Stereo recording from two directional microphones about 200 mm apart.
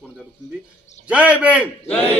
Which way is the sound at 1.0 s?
5° right (ahead or behind).